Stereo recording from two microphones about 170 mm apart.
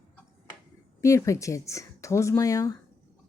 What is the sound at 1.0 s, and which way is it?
Speech, 20° left (ahead or behind).